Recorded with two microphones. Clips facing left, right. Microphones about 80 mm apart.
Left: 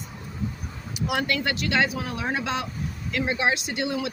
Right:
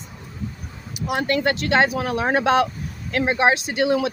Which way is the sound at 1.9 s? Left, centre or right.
Right.